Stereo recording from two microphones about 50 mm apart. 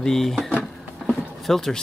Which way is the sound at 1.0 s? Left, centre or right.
Centre.